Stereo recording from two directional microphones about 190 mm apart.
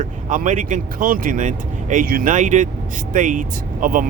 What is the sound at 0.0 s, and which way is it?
Speech, 45° right (ahead or behind).